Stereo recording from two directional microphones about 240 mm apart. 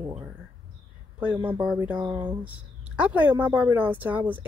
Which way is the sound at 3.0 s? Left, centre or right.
Centre.